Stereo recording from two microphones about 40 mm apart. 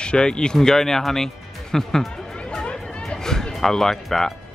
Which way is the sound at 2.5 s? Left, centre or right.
Left.